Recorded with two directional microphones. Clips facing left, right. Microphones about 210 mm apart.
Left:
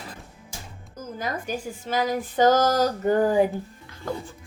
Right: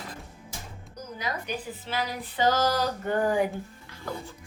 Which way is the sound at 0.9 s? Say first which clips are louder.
Left 3 dB; 45° left (ahead or behind).